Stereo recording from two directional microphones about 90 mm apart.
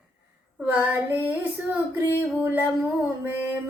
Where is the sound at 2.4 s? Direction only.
20° right (ahead or behind).